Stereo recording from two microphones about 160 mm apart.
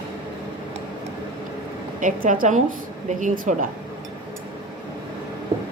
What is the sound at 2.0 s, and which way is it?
Speech, 55° right (ahead or behind).